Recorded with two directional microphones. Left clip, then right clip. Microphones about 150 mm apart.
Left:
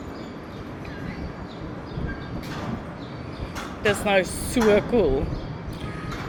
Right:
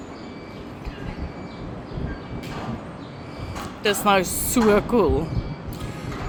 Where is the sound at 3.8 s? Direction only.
30° right (ahead or behind).